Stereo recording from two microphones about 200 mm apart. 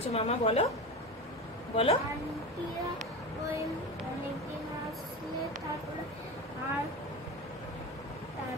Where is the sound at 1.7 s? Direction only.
25° left (ahead or behind).